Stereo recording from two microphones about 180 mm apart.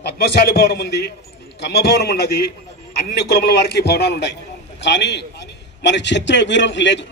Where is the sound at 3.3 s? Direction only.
65° left (ahead or behind).